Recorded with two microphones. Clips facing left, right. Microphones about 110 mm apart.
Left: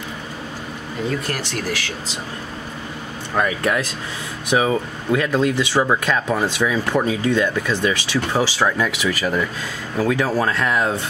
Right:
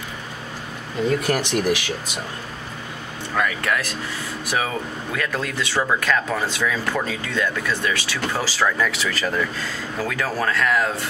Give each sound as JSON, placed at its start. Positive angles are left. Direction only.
{"t": 1.2, "sound": "speech", "side_deg": -15}
{"t": 3.3, "sound": "speech", "side_deg": 25}